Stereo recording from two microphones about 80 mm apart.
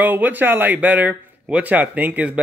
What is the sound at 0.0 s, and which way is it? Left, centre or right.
Speech, right.